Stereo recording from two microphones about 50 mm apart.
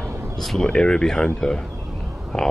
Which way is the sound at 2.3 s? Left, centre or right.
Centre.